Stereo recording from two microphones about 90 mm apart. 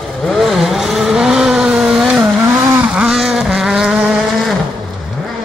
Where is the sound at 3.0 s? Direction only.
5° right (ahead or behind).